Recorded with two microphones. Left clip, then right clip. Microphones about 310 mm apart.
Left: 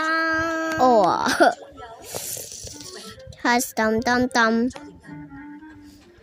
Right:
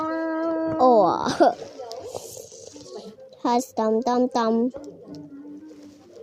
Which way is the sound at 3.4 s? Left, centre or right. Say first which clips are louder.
Left 2 dB; left.